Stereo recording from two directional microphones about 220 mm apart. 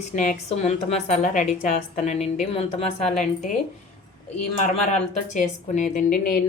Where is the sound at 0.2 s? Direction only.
30° left (ahead or behind).